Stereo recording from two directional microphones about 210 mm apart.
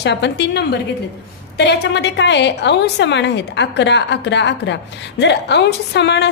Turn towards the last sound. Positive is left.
turn(degrees=55)  # may be behind; listen again after turning